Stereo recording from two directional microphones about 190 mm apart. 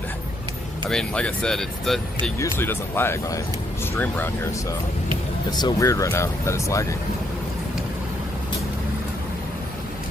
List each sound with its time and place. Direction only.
0.8 s speech: 5° left (ahead or behind)
5.6 s speech: 15° left (ahead or behind)